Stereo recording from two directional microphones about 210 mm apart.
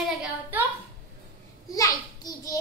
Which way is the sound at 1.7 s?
15° left (ahead or behind).